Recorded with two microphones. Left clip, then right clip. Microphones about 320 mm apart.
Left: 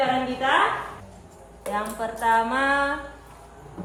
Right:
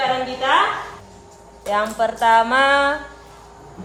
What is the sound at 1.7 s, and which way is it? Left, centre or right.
Speech, right.